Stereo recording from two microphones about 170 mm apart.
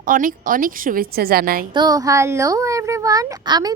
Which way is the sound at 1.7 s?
25° right (ahead or behind).